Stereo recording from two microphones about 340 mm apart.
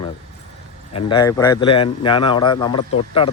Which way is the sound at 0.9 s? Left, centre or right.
Centre.